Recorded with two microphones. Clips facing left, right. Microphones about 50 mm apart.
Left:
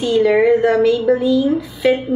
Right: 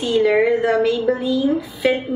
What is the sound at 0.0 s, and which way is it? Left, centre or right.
A woman's voice, centre.